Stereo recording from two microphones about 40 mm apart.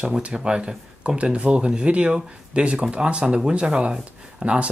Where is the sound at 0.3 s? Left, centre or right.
Right.